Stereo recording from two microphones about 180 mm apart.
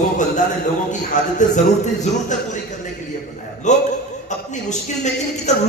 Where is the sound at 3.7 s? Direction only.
40° left (ahead or behind).